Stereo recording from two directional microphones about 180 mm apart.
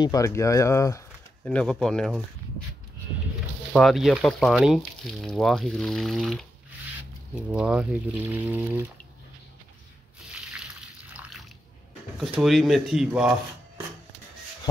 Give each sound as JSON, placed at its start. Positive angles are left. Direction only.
{"t": 0.0, "sound": "speech", "side_deg": 20}
{"t": 3.7, "sound": "speech", "side_deg": 0}
{"t": 7.5, "sound": "speech", "side_deg": -5}
{"t": 12.2, "sound": "speech", "side_deg": 0}